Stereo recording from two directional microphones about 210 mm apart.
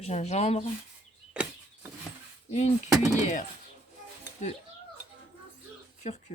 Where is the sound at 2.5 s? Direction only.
35° left (ahead or behind).